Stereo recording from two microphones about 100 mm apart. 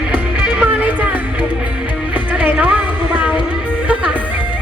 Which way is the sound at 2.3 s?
15° right (ahead or behind).